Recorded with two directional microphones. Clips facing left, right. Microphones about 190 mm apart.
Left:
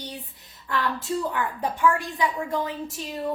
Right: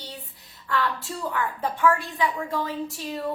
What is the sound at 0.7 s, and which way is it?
A woman's voice, 20° left (ahead or behind).